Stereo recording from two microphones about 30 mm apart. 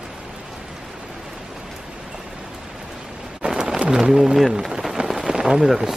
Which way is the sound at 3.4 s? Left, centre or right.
Right.